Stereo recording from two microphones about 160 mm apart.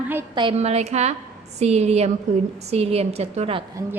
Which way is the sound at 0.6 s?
40° right (ahead or behind).